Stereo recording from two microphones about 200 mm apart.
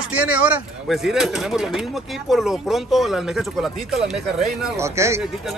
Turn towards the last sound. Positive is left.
turn(degrees=-15)  # may be behind; listen again after turning